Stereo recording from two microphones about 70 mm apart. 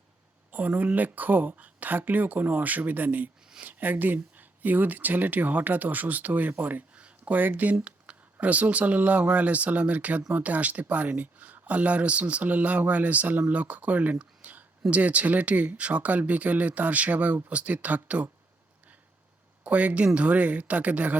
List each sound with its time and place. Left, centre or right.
0.5 s speech: right
19.6 s speech: centre